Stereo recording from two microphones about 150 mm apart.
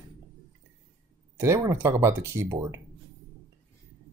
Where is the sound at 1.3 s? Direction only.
20° right (ahead or behind).